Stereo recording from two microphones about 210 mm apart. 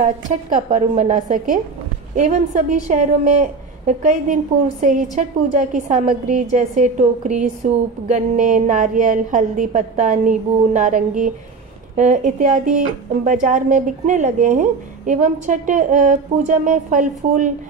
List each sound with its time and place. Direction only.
0.5 s speech: 40° right (ahead or behind)